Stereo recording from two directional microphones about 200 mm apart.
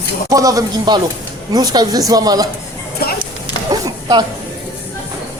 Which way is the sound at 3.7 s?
20° right (ahead or behind).